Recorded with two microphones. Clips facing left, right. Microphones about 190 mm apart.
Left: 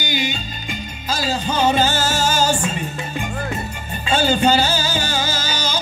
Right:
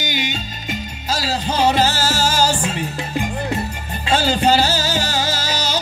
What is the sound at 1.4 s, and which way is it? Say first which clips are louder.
Music: right 1 dB; 80° right.